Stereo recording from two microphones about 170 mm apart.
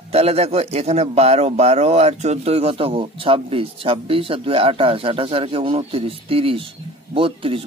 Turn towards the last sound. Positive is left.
turn(degrees=-30)  # may be behind; listen again after turning